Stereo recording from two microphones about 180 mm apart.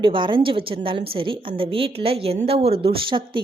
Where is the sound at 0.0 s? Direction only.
25° right (ahead or behind).